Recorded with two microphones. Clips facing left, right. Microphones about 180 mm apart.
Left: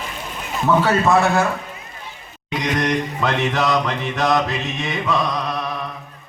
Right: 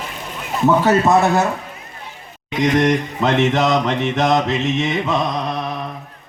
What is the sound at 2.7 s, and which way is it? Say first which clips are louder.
Mantra: right 3 dB; 25° right (ahead or behind).